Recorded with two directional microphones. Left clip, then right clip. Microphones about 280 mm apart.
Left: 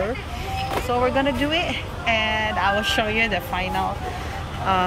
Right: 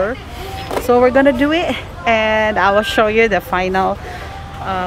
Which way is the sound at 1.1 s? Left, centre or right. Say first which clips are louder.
Right 9 dB; centre.